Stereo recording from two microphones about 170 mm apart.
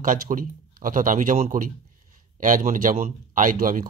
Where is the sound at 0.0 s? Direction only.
50° right (ahead or behind).